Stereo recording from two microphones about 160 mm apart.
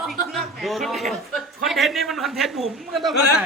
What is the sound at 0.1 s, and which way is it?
A man's voice, centre (ahead or behind).